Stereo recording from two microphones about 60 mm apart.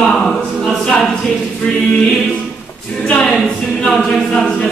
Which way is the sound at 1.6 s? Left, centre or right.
Centre.